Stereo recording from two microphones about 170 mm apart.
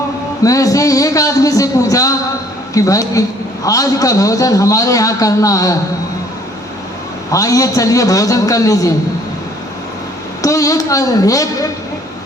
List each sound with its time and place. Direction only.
0.4 s a man's voice: 20° left (ahead or behind)
7.3 s a man's voice: 20° left (ahead or behind)
10.4 s a man's voice: 20° left (ahead or behind)